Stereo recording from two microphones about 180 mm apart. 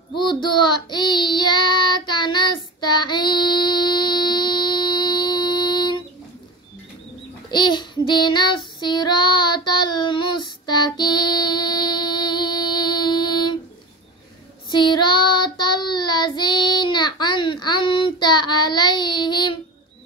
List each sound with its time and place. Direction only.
0.2 s child singing: 25° left (ahead or behind)
7.5 s child singing: 25° left (ahead or behind)
14.7 s child singing: 25° left (ahead or behind)